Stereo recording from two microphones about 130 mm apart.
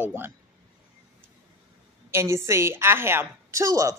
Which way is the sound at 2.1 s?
20° right (ahead or behind).